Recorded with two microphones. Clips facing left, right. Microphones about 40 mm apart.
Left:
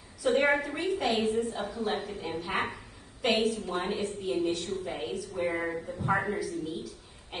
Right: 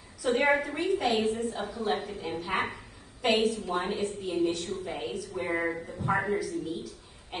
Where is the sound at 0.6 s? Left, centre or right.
Centre.